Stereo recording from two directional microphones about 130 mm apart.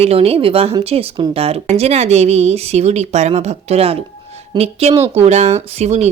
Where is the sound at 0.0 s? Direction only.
50° right (ahead or behind).